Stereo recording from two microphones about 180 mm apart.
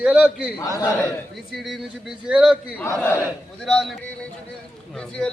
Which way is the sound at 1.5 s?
Centre (ahead or behind).